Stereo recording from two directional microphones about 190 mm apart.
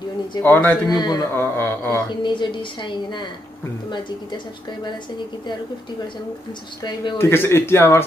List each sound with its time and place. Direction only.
0.4 s speech: 10° left (ahead or behind)
0.8 s a man's voice: 20° left (ahead or behind)
2.2 s a man's voice: 25° left (ahead or behind)
6.8 s speech: 20° left (ahead or behind)